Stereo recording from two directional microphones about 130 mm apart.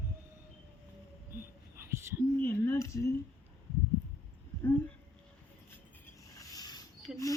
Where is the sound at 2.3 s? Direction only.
15° left (ahead or behind).